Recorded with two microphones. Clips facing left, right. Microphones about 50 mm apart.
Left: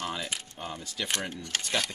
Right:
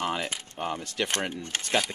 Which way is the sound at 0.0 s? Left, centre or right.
Right.